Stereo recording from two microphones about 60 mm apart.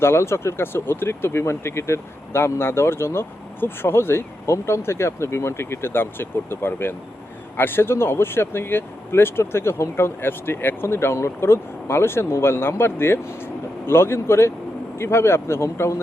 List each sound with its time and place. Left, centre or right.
0.0 s speech: left